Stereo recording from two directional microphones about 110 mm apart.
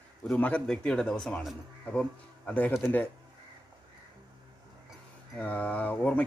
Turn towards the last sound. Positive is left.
turn(degrees=15)  # may be behind; listen again after turning